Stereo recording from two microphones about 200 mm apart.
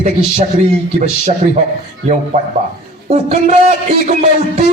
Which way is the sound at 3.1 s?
35° right (ahead or behind).